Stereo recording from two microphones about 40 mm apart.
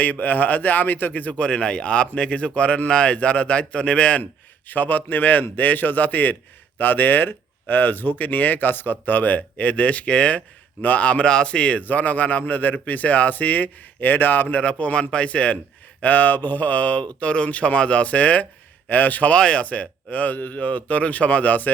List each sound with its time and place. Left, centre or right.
0.0 s speech: left
1.4 s speech: left
4.7 s speech: left
11.3 s speech: left
11.8 s speech: left
14.5 s speech: left
16.0 s speech: left
19.3 s speech: left